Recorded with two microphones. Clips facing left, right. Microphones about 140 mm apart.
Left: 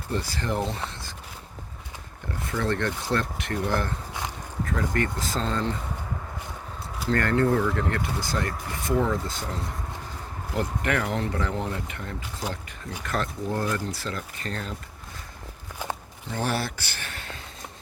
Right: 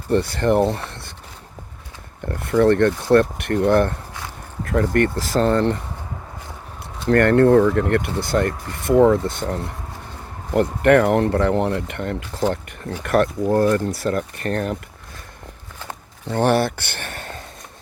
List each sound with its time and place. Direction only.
0.1 s speech: 65° right (ahead or behind)
2.2 s speech: 55° right (ahead or behind)
5.3 s speech: 65° right (ahead or behind)
7.1 s speech: 60° right (ahead or behind)
16.3 s speech: 60° right (ahead or behind)